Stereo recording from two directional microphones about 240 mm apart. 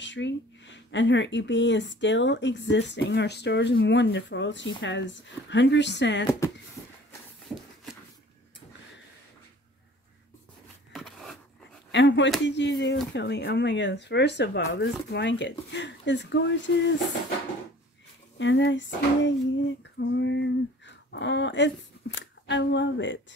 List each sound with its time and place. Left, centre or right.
0.0 s speech: left
10.9 s a sound: centre
11.9 s speech: left
18.4 s speech: left